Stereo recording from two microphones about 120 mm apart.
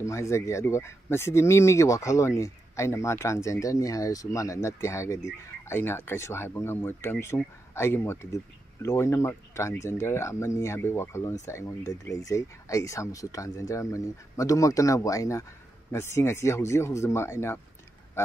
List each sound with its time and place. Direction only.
0.0 s speech: 25° left (ahead or behind)